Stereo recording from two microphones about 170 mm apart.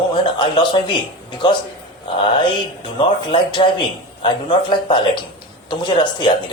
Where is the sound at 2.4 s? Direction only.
30° left (ahead or behind).